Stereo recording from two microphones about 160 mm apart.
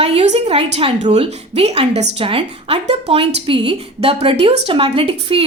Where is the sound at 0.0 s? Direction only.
40° right (ahead or behind).